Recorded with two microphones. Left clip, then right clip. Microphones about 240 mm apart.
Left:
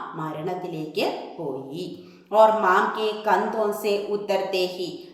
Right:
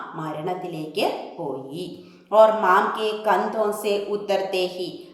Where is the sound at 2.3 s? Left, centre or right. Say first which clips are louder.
Right 1 dB; centre.